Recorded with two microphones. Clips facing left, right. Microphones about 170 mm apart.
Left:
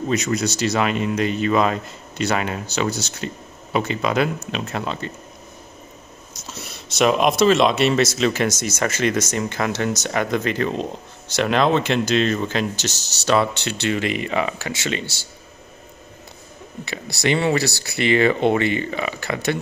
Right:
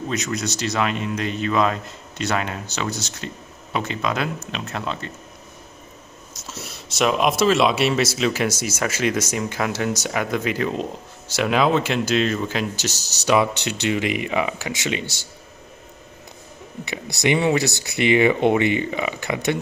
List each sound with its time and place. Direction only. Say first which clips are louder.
0.1 s speech: left 5 dB; centre (ahead or behind)
6.5 s speech: even; centre (ahead or behind)
16.8 s speech: even; 20° right (ahead or behind)